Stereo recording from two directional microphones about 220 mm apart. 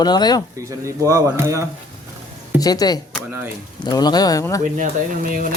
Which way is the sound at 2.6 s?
15° left (ahead or behind).